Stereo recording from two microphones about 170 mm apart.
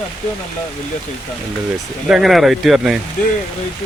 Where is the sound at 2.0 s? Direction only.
Centre (ahead or behind).